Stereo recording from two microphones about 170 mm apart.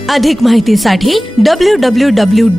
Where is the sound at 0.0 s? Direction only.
Centre (ahead or behind).